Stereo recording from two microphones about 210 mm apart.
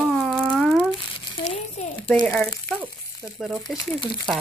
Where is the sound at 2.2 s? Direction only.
5° left (ahead or behind).